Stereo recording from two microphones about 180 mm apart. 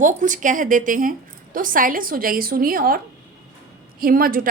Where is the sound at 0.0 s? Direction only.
45° right (ahead or behind).